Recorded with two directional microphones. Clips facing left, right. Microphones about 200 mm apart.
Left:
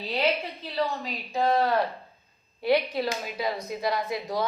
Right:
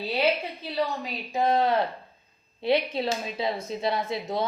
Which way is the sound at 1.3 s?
20° right (ahead or behind).